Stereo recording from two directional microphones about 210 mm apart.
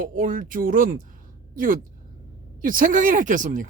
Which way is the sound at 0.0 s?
40° right (ahead or behind).